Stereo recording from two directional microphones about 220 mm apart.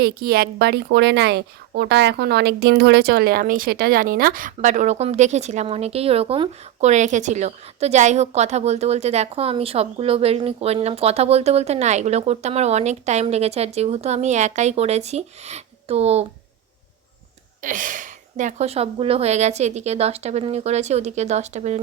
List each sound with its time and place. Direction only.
0.0 s a woman's voice: 45° right (ahead or behind); by 16.2 s 30° right (ahead or behind)
17.6 s a woman's voice: 35° right (ahead or behind)